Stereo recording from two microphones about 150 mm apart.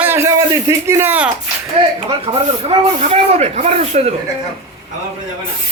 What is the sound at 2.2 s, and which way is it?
Speech, 40° right (ahead or behind).